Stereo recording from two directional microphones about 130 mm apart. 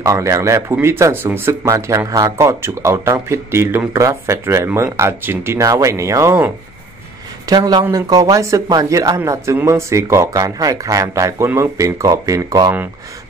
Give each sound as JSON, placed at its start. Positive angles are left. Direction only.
{"t": 0.0, "sound": "speech", "side_deg": -25}
{"t": 7.4, "sound": "speech", "side_deg": -30}